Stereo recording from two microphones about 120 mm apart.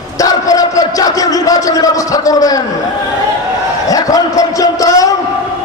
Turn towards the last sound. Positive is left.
turn(degrees=30)  # may be behind; listen again after turning